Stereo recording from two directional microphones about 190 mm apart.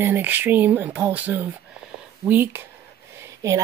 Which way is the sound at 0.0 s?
10° right (ahead or behind).